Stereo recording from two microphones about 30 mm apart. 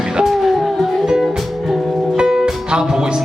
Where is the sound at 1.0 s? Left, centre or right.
Centre.